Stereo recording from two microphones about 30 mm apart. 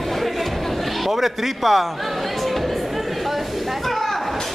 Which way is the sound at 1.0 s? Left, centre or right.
Centre.